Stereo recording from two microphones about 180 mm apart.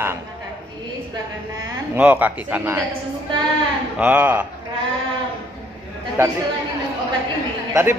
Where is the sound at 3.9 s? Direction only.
10° right (ahead or behind).